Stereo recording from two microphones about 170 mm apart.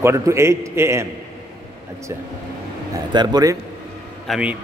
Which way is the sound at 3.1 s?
25° right (ahead or behind).